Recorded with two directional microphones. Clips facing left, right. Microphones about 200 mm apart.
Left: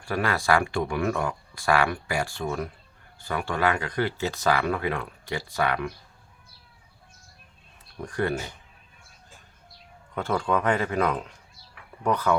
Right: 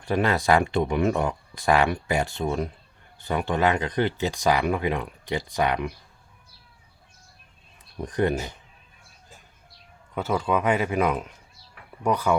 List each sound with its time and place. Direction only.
0.0 s speech: 20° right (ahead or behind)
8.0 s speech: 20° right (ahead or behind)
10.2 s speech: 5° right (ahead or behind)